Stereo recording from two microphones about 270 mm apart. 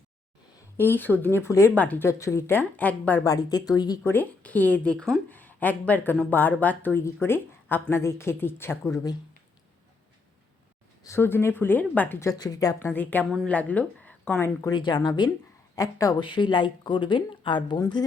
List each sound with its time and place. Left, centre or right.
0.8 s speech: centre
11.0 s speech: centre